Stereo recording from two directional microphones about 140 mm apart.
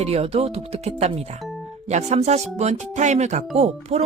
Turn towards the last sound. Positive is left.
turn(degrees=-50)  # may be behind; listen again after turning